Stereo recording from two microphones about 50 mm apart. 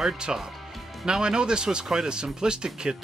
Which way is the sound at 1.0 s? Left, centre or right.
Centre.